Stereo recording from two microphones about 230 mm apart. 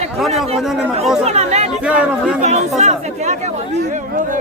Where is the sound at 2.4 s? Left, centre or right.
Right.